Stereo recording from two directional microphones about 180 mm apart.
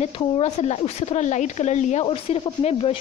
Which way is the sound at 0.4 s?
40° left (ahead or behind).